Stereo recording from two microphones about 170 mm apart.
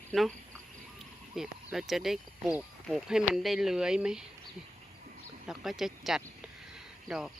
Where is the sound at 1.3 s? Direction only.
Centre (ahead or behind).